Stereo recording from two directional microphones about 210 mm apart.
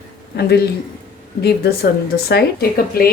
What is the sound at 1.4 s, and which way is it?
Speech, 50° left (ahead or behind).